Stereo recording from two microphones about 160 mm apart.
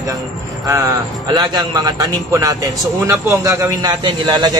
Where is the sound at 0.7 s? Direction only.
20° right (ahead or behind).